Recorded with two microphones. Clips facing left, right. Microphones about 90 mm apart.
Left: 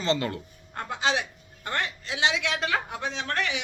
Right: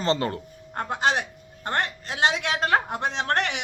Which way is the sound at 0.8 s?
50° right (ahead or behind).